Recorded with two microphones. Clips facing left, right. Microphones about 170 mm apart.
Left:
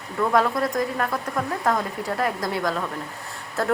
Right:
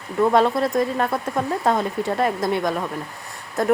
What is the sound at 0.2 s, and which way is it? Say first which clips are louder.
A woman's voice: right 4 dB; 25° right (ahead or behind).